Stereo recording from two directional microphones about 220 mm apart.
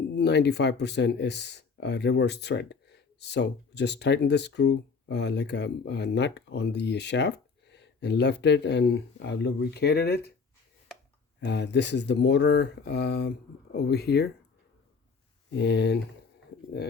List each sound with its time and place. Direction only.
0.2 s speech: 50° left (ahead or behind)
11.3 s speech: 50° left (ahead or behind)
15.5 s speech: 50° left (ahead or behind)